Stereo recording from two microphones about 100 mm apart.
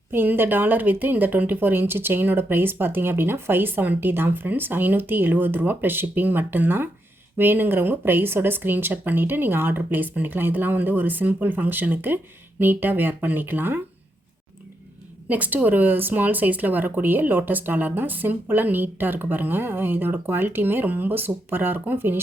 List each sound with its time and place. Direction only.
0.1 s speech: 20° right (ahead or behind)
15.3 s speech: 15° right (ahead or behind)